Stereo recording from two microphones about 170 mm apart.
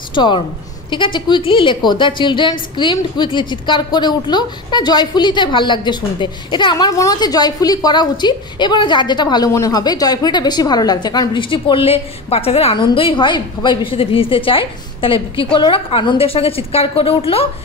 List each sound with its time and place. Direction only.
0.1 s a woman's voice: 25° left (ahead or behind)